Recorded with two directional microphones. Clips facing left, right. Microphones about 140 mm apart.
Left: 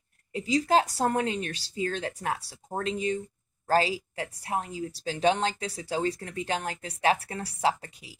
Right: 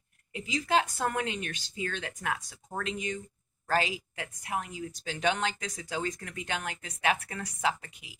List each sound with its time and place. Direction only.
0.3 s speech: 35° left (ahead or behind)